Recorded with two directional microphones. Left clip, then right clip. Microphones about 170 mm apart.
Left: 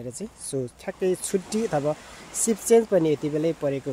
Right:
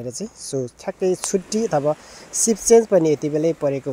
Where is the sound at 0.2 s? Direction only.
25° right (ahead or behind).